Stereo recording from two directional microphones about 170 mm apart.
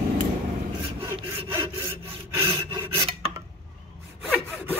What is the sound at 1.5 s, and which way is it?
Sawing, 15° right (ahead or behind).